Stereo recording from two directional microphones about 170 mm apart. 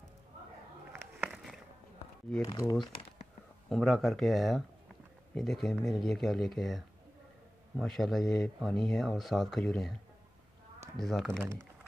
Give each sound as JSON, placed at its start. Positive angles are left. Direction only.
{"t": 0.9, "sound": "a sound", "side_deg": -5}
{"t": 2.4, "sound": "speech", "side_deg": 20}
{"t": 3.6, "sound": "speech", "side_deg": 0}
{"t": 11.0, "sound": "speech", "side_deg": 0}